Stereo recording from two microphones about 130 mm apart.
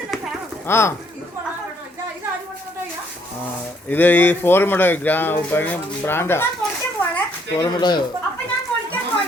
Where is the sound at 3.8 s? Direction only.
15° left (ahead or behind).